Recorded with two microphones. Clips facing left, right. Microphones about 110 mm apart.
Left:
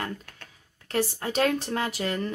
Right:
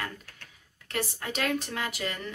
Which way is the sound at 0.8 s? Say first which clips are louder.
Left 6 dB; 35° left (ahead or behind).